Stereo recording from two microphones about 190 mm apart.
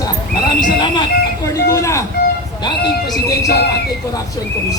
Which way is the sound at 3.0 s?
20° left (ahead or behind).